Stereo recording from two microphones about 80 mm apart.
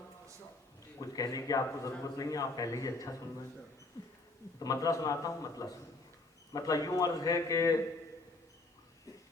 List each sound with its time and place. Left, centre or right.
1.0 s a man's voice: left
4.6 s a man's voice: left